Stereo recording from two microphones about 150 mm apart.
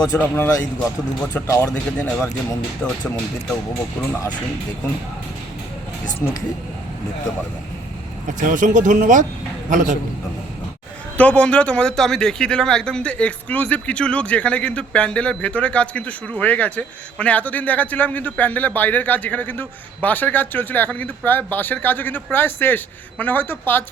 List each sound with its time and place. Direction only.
0.2 s a man's voice: 15° left (ahead or behind)
1.5 s a man's voice: 20° left (ahead or behind)
8.4 s a man's voice: 60° right (ahead or behind)
11.2 s a man's voice: 10° left (ahead or behind)